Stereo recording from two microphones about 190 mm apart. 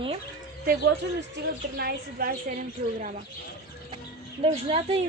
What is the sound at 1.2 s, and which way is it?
A woman's voice, 60° right (ahead or behind).